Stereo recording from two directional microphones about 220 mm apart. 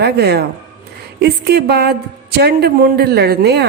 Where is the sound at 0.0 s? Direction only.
50° right (ahead or behind).